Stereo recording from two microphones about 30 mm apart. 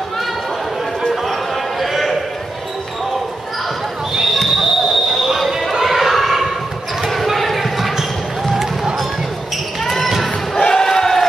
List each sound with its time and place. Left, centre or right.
1.8 s basketball bounce: centre
4.1 s basketball bounce: centre
5.5 s a sound: centre
7.0 s basketball bounce: centre
9.8 s basketball bounce: centre
10.5 s basketball bounce: centre